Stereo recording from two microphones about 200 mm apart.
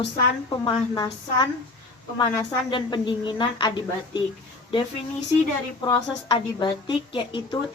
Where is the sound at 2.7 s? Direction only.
25° left (ahead or behind).